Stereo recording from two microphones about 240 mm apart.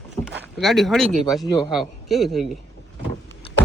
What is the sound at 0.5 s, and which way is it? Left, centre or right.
Speech, centre.